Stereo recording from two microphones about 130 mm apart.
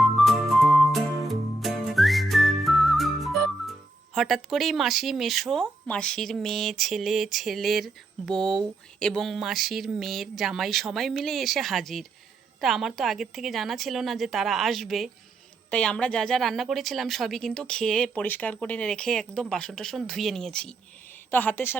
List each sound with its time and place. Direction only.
0.2 s music: centre (ahead or behind)
4.1 s a woman's voice: centre (ahead or behind); by 21.8 s 15° left (ahead or behind)